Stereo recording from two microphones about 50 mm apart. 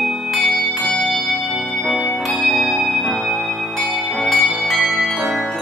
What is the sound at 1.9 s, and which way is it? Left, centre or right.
Change ringing, centre.